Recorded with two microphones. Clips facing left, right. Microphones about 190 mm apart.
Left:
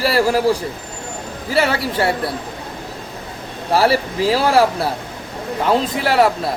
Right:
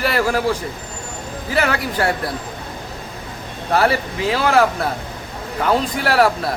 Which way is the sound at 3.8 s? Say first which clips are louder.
Left 3 dB; 35° left (ahead or behind).